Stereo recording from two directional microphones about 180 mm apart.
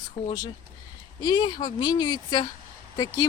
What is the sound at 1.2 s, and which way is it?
Speech, 25° left (ahead or behind).